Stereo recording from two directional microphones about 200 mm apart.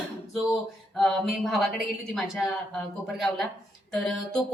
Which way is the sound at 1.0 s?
Centre (ahead or behind).